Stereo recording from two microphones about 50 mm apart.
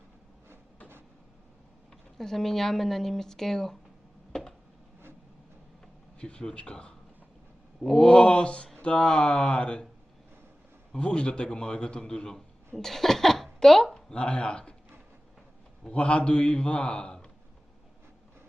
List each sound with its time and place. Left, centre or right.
2.1 s speech: centre
4.3 s a sound: centre
6.1 s speech: left
10.9 s speech: left
12.7 s speech: centre
14.1 s speech: left
15.9 s speech: left